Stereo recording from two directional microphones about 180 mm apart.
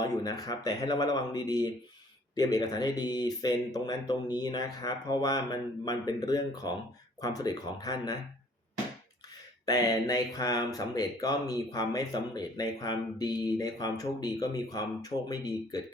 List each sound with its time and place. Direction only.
0.0 s speech: 20° left (ahead or behind)
9.6 s speech: 20° left (ahead or behind)